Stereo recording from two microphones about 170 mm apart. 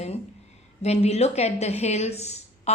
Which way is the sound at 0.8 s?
40° left (ahead or behind).